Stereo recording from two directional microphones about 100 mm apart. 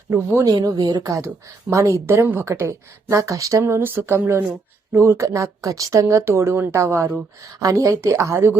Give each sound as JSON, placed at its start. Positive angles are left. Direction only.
{"t": 0.1, "sound": "a woman's voice", "side_deg": -25}